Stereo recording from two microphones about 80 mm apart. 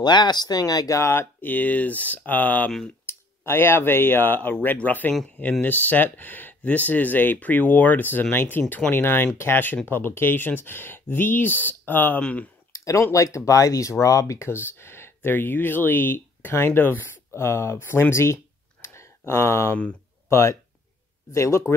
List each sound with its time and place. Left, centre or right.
0.0 s speech: left
1.4 s speech: left
12.7 s a sound: left
13.1 s speech: left
18.1 s a sound: left
20.2 s speech: left